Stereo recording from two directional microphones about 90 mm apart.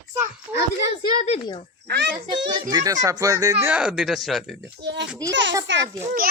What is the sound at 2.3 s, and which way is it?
Speech, 55° right (ahead or behind).